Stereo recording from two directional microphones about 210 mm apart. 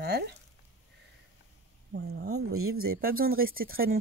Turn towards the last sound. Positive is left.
turn(degrees=-45)  # may be behind; listen again after turning